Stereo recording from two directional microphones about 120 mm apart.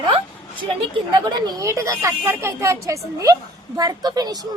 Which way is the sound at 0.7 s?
40° right (ahead or behind).